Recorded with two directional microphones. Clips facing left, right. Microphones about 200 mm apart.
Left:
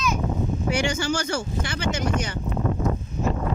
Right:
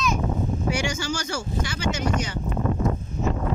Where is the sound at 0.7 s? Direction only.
55° left (ahead or behind).